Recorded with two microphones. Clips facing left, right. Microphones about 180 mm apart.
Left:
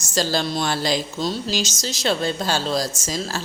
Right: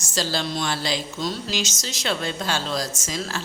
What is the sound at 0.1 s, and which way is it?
A woman's voice, 45° left (ahead or behind).